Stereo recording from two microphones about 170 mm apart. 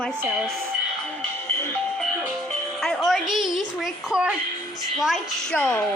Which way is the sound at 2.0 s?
5° right (ahead or behind).